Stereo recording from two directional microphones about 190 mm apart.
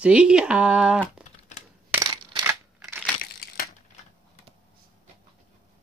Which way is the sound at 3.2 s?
50° left (ahead or behind).